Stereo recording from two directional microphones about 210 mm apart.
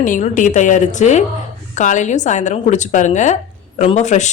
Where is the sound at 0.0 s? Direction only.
40° left (ahead or behind).